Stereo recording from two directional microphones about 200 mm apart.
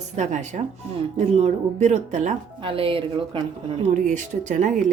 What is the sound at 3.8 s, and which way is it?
Speech, 40° right (ahead or behind).